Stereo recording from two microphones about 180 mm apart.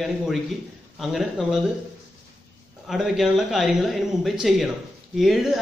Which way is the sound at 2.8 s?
Centre (ahead or behind).